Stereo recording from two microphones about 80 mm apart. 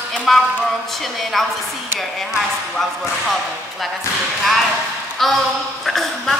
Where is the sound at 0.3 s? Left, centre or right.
Centre.